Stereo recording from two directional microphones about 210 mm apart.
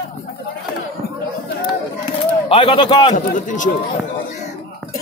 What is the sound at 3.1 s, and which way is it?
Speech, 35° left (ahead or behind).